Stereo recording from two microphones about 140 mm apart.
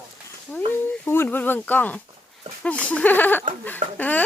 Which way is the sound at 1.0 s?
15° left (ahead or behind).